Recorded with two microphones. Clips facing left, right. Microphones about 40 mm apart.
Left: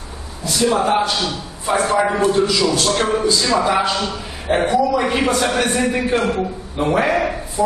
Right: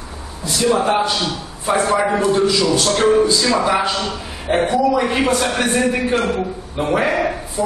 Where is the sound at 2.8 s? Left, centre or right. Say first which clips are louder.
Right 3 dB; centre.